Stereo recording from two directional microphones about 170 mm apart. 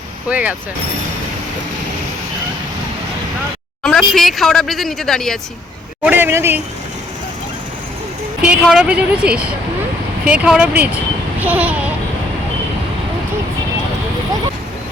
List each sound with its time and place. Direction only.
0.3 s a child's voice: 10° right (ahead or behind)
3.8 s speech: centre (ahead or behind)
6.1 s a child's voice: 10° right (ahead or behind)
8.4 s a child's voice: 5° right (ahead or behind)